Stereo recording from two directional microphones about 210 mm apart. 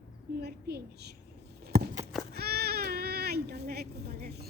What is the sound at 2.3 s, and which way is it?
Baby cry, 50° right (ahead or behind).